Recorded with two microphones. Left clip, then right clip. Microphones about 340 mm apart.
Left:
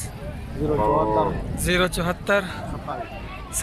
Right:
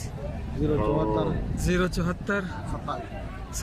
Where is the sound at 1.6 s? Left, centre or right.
Centre.